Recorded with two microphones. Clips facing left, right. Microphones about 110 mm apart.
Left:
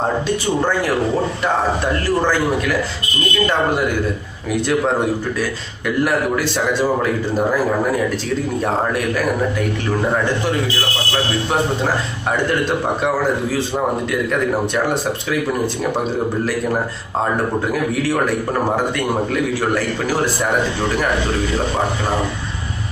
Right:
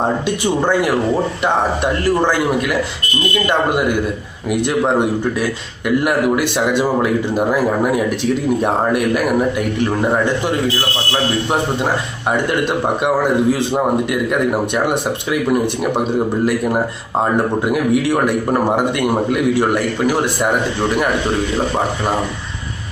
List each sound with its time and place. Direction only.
3.4 s a man's voice: 15° right (ahead or behind)
6.7 s a man's voice: 15° right (ahead or behind)
8.6 s a man's voice: 15° right (ahead or behind)
12.6 s a man's voice: 15° right (ahead or behind)
17.7 s a man's voice: 15° right (ahead or behind)